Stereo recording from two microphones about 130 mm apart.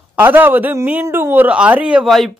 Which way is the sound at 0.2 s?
15° right (ahead or behind).